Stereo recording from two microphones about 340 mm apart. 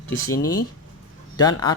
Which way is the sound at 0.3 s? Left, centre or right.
Centre.